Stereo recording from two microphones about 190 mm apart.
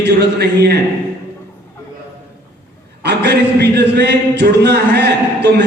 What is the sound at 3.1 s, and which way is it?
Speech, 60° right (ahead or behind).